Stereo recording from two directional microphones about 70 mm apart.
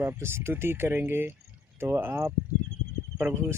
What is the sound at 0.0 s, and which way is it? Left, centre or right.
Speech, right.